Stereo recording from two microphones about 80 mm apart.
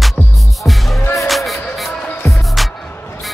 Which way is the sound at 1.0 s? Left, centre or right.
Left.